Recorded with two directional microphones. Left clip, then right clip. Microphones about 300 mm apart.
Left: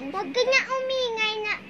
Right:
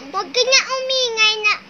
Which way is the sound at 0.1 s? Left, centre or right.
Right.